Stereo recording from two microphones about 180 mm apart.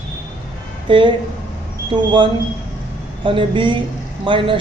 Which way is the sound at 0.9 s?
25° right (ahead or behind).